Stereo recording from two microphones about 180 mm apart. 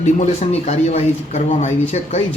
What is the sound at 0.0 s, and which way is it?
A man's voice, 35° left (ahead or behind).